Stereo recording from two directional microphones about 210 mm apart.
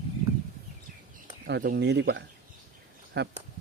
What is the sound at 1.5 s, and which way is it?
Speech, 50° right (ahead or behind).